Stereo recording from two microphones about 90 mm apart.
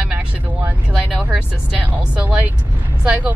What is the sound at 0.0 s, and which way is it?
Vehicle, 15° right (ahead or behind).